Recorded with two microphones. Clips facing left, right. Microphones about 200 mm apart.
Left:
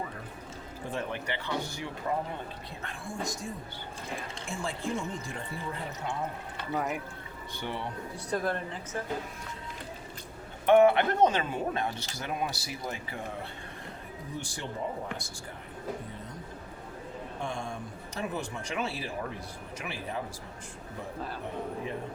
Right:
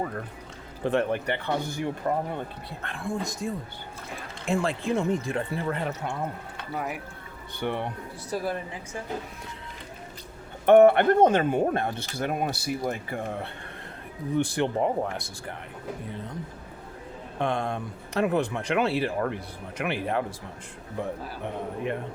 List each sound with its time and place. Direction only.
0.9 s speech: 60° right (ahead or behind)
6.7 s speech: centre (ahead or behind)
7.6 s speech: 55° right (ahead or behind)
8.3 s speech: 10° right (ahead or behind)
10.7 s speech: 55° right (ahead or behind)
17.4 s speech: 60° right (ahead or behind)